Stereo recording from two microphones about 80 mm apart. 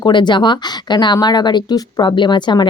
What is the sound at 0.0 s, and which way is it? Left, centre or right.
Speech, left.